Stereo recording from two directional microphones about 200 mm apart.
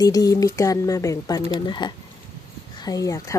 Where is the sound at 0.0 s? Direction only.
20° left (ahead or behind).